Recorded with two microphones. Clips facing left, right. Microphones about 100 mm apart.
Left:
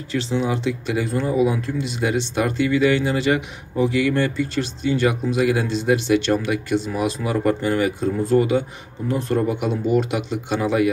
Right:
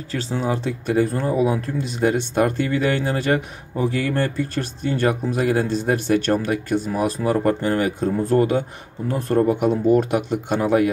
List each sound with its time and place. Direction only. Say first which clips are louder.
0.3 s speech: left 1 dB; 45° right (ahead or behind)